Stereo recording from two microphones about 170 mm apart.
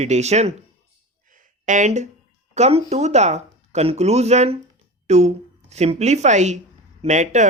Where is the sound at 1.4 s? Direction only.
45° right (ahead or behind).